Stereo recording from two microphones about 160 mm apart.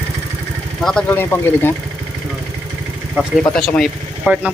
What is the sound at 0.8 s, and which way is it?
Speech, 5° left (ahead or behind).